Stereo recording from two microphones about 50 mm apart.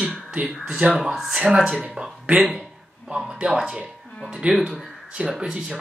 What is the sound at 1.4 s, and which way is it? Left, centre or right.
Speech, centre.